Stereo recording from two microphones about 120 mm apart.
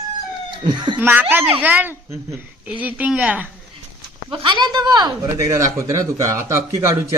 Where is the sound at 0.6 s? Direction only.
40° right (ahead or behind).